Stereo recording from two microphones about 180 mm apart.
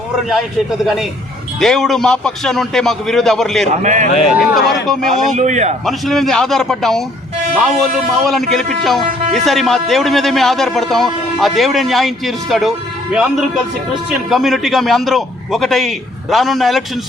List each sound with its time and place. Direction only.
1.5 s a man's voice: centre (ahead or behind)
3.8 s a man's voice: 45° right (ahead or behind)
4.3 s a man's voice: centre (ahead or behind)
5.1 s speech: 45° right (ahead or behind)
5.8 s a man's voice: centre (ahead or behind)
8.2 s a man's voice: centre (ahead or behind)